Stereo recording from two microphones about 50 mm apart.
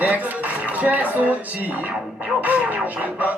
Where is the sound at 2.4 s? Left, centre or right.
Right.